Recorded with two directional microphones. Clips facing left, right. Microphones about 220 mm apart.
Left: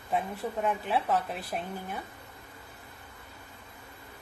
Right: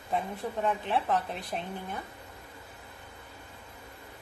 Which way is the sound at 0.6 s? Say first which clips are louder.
Even; 5° left (ahead or behind).